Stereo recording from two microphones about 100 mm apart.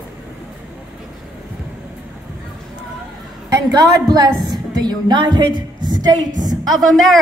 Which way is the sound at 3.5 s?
45° right (ahead or behind).